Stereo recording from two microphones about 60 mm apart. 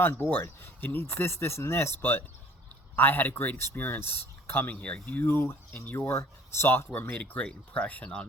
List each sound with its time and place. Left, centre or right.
0.0 s speech: left
2.0 s speech: left
4.7 s speech: left
5.2 s speech: left
5.8 s speech: left
6.1 s speech: left
7.2 s speech: left